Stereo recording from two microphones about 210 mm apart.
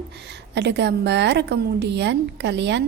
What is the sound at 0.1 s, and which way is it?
A woman's voice, 55° right (ahead or behind).